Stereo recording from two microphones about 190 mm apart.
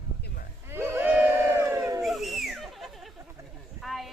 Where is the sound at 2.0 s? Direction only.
Centre (ahead or behind).